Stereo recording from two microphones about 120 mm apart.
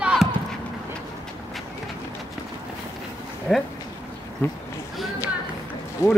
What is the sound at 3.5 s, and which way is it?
Speech, centre (ahead or behind).